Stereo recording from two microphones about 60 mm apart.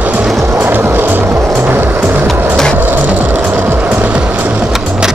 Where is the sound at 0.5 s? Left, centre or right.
Right.